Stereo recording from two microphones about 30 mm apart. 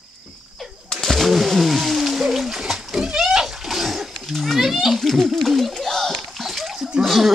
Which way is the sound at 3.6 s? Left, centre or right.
Centre.